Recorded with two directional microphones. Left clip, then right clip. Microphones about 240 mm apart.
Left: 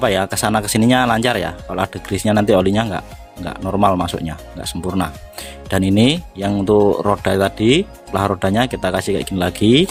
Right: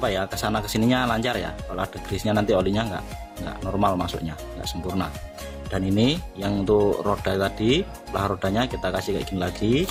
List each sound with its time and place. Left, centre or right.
0.0 s speech: left